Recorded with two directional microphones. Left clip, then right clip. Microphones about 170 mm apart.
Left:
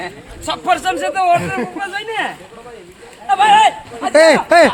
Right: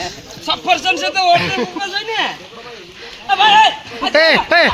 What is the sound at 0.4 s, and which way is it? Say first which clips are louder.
Speech: right 1 dB; 5° left (ahead or behind).